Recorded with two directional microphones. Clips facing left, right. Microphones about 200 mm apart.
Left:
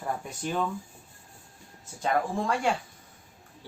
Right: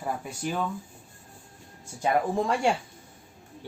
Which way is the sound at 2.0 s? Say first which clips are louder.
Right 3 dB; 20° right (ahead or behind).